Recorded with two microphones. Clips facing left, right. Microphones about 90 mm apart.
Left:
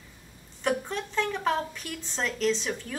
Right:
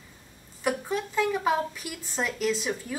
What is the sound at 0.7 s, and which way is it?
A woman's voice, 5° right (ahead or behind).